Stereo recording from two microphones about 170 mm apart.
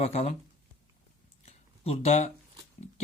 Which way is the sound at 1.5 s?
35° left (ahead or behind).